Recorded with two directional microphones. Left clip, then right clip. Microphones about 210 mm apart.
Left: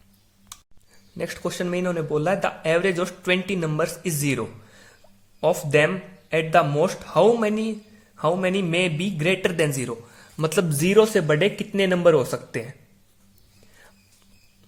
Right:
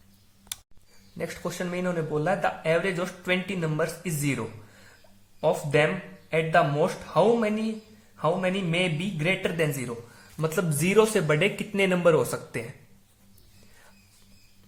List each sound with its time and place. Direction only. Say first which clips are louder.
1.2 s speech: left 4 dB; 35° left (ahead or behind)